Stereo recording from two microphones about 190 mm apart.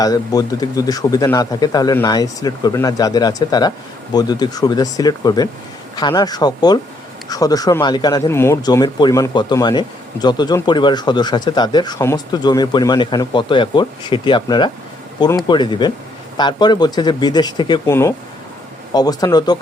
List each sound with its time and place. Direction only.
0.0 s speech: 20° left (ahead or behind)